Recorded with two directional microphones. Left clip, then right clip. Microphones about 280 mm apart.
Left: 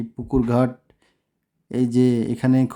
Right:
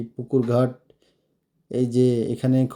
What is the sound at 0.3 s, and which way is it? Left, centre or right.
Speech, centre.